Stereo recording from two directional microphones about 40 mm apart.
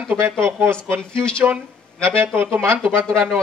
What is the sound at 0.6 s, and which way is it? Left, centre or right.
Speech, right.